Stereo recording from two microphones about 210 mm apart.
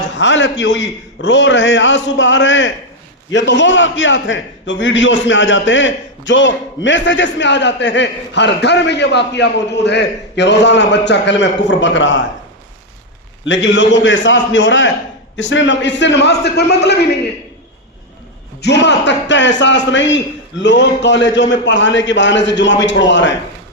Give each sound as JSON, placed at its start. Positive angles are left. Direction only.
{"t": 0.2, "sound": "a man's voice", "side_deg": 60}
{"t": 13.4, "sound": "a man's voice", "side_deg": 60}
{"t": 18.6, "sound": "a man's voice", "side_deg": 55}